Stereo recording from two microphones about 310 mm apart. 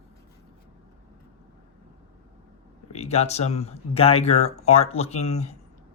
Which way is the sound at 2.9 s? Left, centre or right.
Left.